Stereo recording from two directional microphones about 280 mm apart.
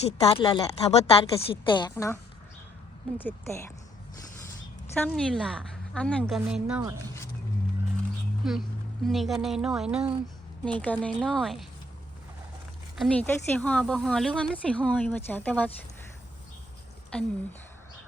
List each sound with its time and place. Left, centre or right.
0.0 s a woman's voice: centre
3.2 s a woman's voice: centre
4.9 s speech: centre
8.4 s speech: centre
13.0 s speech: centre
17.1 s speech: centre